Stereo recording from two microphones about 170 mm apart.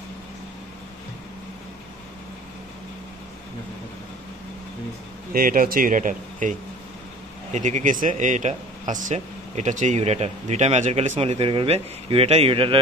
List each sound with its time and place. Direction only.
5.3 s speech: 55° right (ahead or behind)
7.5 s speech: 45° right (ahead or behind)